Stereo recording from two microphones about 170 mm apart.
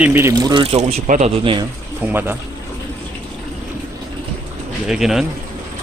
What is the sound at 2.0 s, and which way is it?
Speech, 15° right (ahead or behind).